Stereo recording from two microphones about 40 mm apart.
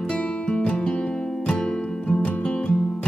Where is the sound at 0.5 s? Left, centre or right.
Left.